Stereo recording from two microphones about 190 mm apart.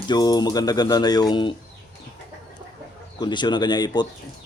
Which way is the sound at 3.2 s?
25° left (ahead or behind).